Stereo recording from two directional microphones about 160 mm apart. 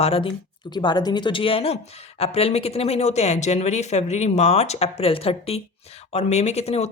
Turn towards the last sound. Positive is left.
turn(degrees=40)  # may be behind; listen again after turning